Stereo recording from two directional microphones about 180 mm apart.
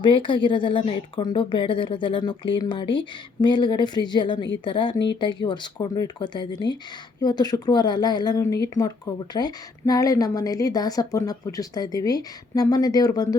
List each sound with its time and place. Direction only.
0.0 s speech: 25° left (ahead or behind)